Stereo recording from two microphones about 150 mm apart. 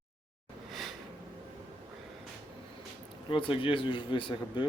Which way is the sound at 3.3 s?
35° left (ahead or behind).